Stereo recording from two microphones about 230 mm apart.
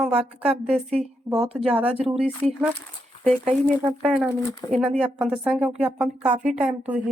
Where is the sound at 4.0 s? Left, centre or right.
Centre.